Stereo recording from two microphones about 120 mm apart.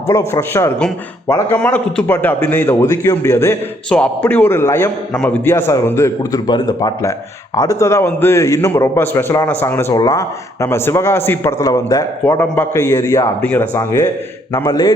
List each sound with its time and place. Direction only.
0.1 s a man's voice: 25° left (ahead or behind)
3.8 s a man's voice: 10° left (ahead or behind)
5.1 s a man's voice: 10° left (ahead or behind)
5.5 s speech: 20° left (ahead or behind)
6.3 s speech: 30° left (ahead or behind)
10.0 s speech: 30° left (ahead or behind)
12.2 s speech: 15° left (ahead or behind)